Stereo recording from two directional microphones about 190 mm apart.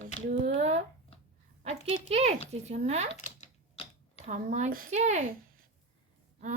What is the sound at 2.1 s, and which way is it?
Speech, 35° right (ahead or behind).